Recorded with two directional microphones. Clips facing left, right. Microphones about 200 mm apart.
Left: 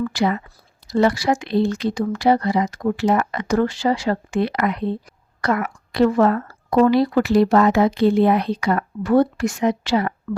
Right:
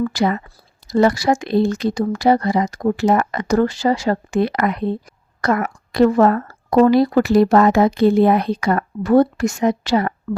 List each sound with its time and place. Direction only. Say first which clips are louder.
0.0 s speech: right 2 dB; 40° right (ahead or behind)
10.3 s speech: right 2 dB; 35° right (ahead or behind)